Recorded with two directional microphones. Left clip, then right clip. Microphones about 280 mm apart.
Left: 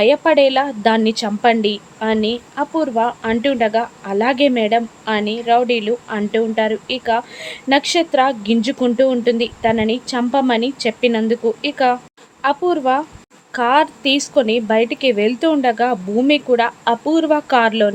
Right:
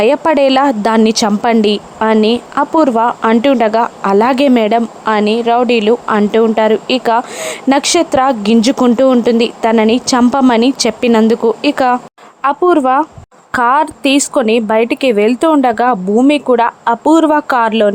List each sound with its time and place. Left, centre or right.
0.0 s a woman's voice: right